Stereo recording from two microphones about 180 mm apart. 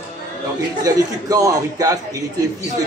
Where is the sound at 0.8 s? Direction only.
20° right (ahead or behind).